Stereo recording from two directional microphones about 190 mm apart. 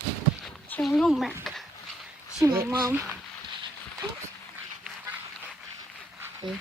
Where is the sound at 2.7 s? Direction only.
15° right (ahead or behind).